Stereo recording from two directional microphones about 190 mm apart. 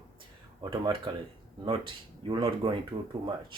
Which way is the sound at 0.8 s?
25° right (ahead or behind).